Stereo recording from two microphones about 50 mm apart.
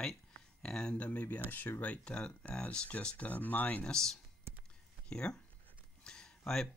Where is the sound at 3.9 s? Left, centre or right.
Centre.